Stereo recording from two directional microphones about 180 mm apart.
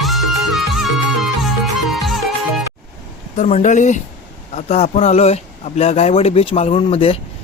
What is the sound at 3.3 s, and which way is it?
Speech, 40° left (ahead or behind).